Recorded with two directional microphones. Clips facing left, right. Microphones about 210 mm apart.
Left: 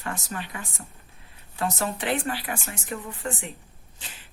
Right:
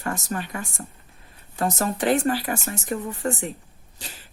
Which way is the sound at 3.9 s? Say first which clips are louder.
Right 5 dB; 40° right (ahead or behind).